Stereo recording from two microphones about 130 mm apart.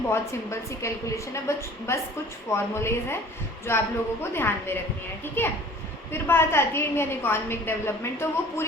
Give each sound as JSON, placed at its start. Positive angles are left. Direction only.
{"t": 0.1, "sound": "a woman's voice", "side_deg": 20}